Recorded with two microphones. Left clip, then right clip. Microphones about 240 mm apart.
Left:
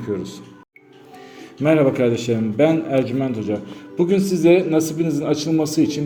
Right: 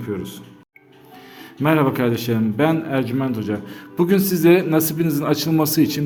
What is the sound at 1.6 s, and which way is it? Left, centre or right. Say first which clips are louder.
A man's voice: left 2 dB; centre.